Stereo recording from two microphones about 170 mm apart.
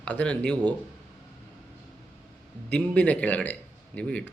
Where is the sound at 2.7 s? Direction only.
5° left (ahead or behind).